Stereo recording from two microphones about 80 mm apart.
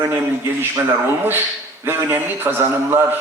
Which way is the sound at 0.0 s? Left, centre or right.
Right.